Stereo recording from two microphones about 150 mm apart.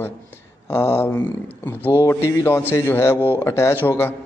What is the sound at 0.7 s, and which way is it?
A man's voice, 15° left (ahead or behind).